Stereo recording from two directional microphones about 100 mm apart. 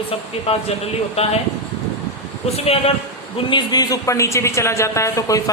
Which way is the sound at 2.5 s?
80° left.